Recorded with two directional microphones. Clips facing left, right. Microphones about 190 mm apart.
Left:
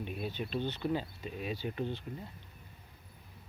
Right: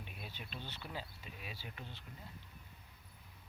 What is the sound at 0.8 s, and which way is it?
Speech, 45° left (ahead or behind).